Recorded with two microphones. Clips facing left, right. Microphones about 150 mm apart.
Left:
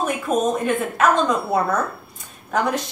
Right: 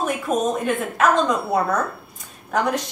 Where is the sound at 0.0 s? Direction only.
Centre (ahead or behind).